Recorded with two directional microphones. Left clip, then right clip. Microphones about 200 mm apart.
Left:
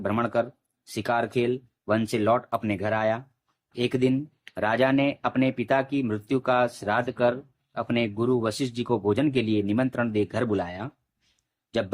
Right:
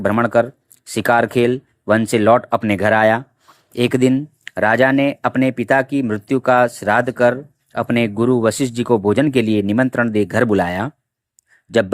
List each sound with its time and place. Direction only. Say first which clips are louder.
0.0 s speech: right 10 dB; 35° right (ahead or behind)